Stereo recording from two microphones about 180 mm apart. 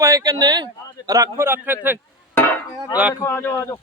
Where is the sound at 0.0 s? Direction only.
20° right (ahead or behind).